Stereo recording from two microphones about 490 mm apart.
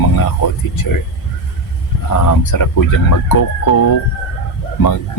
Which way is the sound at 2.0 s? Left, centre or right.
Left.